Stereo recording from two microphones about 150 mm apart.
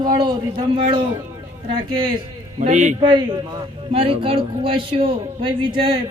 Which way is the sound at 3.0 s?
30° right (ahead or behind).